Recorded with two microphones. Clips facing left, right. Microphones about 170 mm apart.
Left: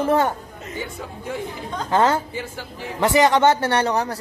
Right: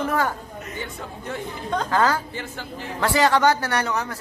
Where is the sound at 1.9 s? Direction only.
25° left (ahead or behind).